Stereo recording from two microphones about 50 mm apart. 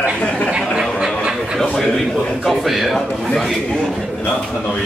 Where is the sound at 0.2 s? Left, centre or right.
Left.